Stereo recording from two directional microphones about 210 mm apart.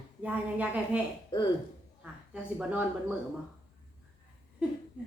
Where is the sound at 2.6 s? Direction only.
5° right (ahead or behind).